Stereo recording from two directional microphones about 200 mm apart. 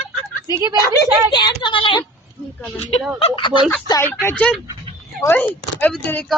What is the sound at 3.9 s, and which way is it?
Speech, 15° left (ahead or behind).